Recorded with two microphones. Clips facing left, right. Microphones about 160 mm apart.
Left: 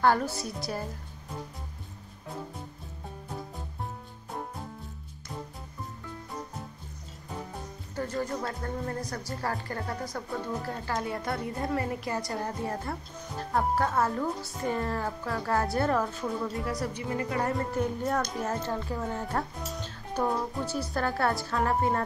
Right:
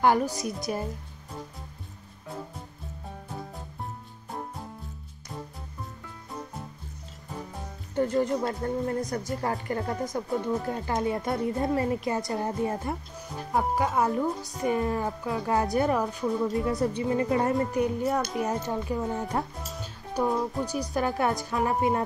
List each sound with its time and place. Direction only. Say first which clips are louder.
0.0 s speech: right 2 dB; 15° right (ahead or behind)
7.9 s a woman's voice: right 7 dB; 20° right (ahead or behind)
17.8 s a child's voice: right 3 dB; 5° right (ahead or behind)
18.4 s speech: right 3 dB; 15° right (ahead or behind)
19.7 s music: even; 5° right (ahead or behind)
20.6 s speech: right 2 dB; 15° right (ahead or behind)